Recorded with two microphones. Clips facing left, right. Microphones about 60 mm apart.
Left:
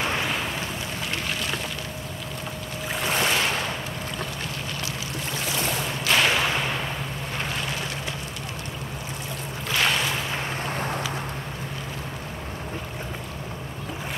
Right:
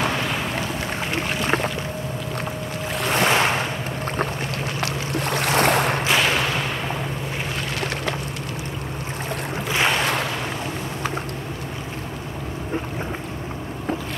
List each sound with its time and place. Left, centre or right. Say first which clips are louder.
1.1 s boat: right 8 dB; right
3.2 s boat: right 6 dB; right
4.7 s boat: right 6 dB; right
6.0 s whip: right 2 dB; centre
9.7 s boat: right 2 dB; centre